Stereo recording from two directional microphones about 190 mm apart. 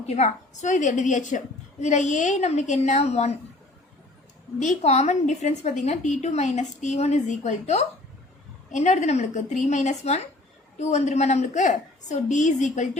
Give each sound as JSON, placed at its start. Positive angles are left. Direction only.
{"t": 0.0, "sound": "a woman's voice", "side_deg": 35}
{"t": 4.6, "sound": "a woman's voice", "side_deg": 35}